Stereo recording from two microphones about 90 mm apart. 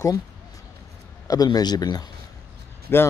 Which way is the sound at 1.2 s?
45° left (ahead or behind).